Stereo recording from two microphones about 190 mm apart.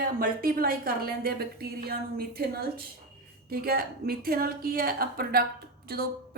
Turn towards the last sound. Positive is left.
turn(degrees=-55)  # may be behind; listen again after turning